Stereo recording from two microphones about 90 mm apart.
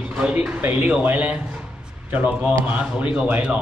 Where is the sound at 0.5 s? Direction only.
15° right (ahead or behind).